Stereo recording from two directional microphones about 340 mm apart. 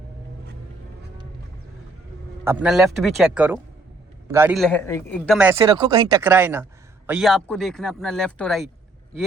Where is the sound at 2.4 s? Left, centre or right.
Centre.